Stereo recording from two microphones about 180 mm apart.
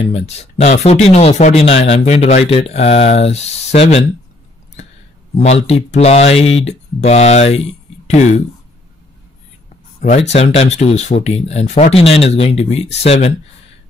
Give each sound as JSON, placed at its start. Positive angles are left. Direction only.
{"t": 0.1, "sound": "speech", "side_deg": 35}
{"t": 5.3, "sound": "speech", "side_deg": 35}
{"t": 9.9, "sound": "speech", "side_deg": 40}